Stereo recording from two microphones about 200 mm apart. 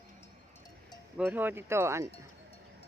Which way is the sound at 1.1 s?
10° right (ahead or behind).